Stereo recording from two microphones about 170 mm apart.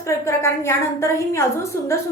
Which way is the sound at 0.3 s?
15° left (ahead or behind).